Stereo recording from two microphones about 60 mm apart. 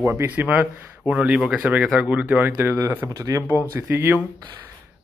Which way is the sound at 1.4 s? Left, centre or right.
Centre.